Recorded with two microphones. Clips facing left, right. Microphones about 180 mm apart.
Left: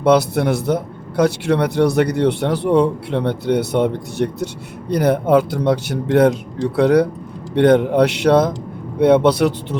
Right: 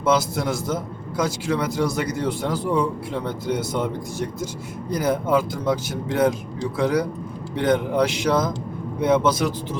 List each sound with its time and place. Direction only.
0.0 s a man's voice: 65° left (ahead or behind)